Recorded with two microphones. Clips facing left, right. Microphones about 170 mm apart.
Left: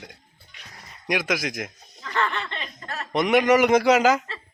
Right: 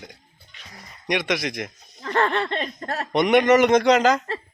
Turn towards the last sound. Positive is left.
turn(degrees=5)  # may be behind; listen again after turning